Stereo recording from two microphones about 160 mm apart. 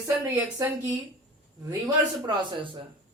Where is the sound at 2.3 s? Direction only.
30° right (ahead or behind).